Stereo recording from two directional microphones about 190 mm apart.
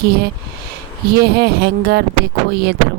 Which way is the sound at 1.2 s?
55° right (ahead or behind).